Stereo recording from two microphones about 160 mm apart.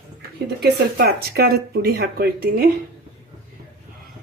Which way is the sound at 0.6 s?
80° right.